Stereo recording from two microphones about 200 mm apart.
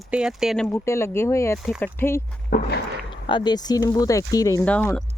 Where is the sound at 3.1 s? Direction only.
25° left (ahead or behind).